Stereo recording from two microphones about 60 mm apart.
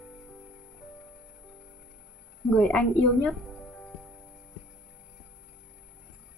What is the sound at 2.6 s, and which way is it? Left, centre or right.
Speech, centre.